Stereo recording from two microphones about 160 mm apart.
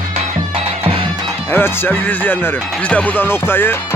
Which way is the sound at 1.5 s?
10° left (ahead or behind).